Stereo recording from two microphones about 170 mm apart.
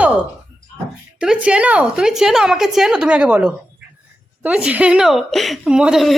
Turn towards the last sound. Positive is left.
turn(degrees=0)  # may be behind; listen again after turning